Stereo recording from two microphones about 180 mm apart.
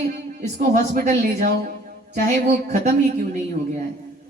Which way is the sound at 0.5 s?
45° right (ahead or behind).